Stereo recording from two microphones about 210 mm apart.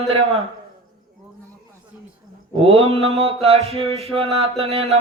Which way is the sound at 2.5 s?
25° right (ahead or behind).